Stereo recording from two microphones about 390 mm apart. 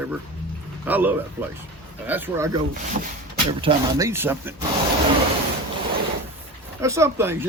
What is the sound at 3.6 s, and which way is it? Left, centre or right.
Speech, centre.